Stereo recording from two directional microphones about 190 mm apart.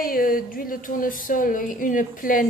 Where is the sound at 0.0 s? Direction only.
50° left (ahead or behind).